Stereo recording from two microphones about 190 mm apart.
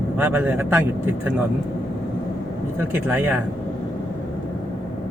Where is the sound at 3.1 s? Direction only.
10° right (ahead or behind).